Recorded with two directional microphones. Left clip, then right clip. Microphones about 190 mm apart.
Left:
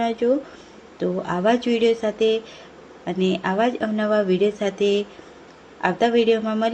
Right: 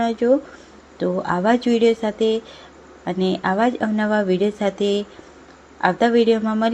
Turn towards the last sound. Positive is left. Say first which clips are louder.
# right 1 dB
turn(degrees=-20)  # may be behind; listen again after turning